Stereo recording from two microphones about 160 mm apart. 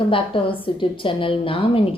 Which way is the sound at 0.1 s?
35° left (ahead or behind).